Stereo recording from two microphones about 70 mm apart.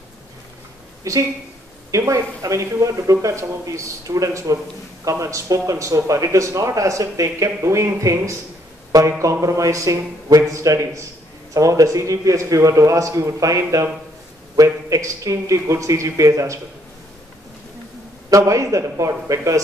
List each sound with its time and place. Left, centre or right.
1.1 s speech: right
18.3 s speech: right